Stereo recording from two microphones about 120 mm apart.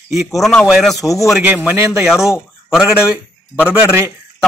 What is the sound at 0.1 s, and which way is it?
A man's voice, centre (ahead or behind).